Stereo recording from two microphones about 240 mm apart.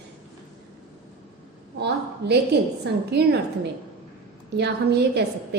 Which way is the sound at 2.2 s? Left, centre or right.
Right.